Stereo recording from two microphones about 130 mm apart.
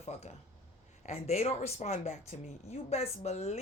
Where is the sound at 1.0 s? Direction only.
60° left (ahead or behind).